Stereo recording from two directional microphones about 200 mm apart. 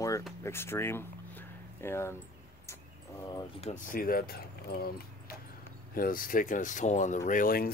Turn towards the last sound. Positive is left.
turn(degrees=45)  # may be behind; listen again after turning